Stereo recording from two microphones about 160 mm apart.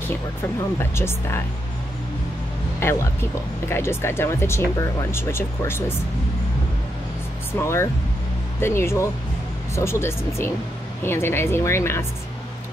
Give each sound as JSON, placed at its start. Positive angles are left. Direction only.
{"t": 0.7, "sound": "speech", "side_deg": 15}
{"t": 2.8, "sound": "speech", "side_deg": 15}
{"t": 7.5, "sound": "speech", "side_deg": 15}